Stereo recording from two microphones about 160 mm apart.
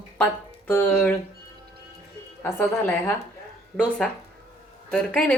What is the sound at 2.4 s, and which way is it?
A woman's voice, 15° left (ahead or behind).